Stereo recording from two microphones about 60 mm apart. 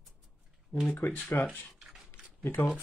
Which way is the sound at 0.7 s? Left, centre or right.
Left.